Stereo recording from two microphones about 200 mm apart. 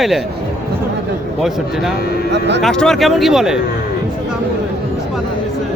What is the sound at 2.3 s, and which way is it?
Speech, 60° right (ahead or behind).